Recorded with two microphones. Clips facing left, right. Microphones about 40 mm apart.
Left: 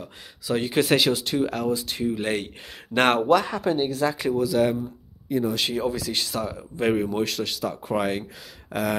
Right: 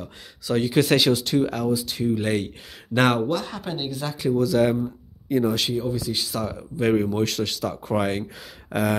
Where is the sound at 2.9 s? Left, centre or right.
Left.